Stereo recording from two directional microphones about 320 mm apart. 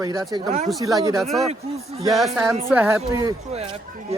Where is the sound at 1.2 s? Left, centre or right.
Centre.